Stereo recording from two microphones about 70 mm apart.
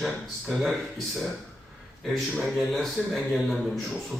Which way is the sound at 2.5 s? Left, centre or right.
Centre.